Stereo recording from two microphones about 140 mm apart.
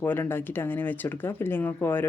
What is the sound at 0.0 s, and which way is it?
Speech, 15° left (ahead or behind).